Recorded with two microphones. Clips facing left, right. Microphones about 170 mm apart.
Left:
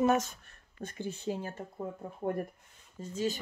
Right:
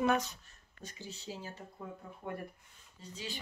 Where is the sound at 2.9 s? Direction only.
45° left (ahead or behind).